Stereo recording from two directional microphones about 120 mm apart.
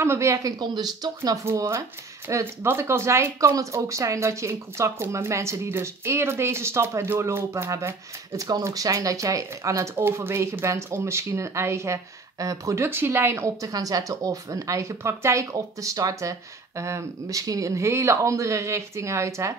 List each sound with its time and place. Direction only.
0.0 s speech: 25° right (ahead or behind)